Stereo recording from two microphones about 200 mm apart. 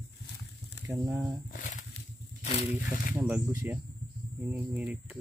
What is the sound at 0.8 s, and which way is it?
Mantra, 10° right (ahead or behind).